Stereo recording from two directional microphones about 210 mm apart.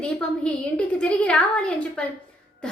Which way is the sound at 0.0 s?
5° left (ahead or behind).